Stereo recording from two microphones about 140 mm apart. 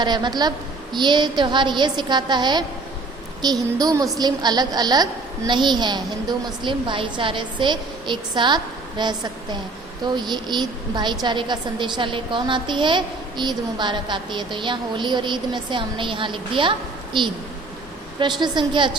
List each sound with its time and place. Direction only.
0.0 s a woman's voice: 30° right (ahead or behind)
18.2 s a woman's voice: 30° right (ahead or behind)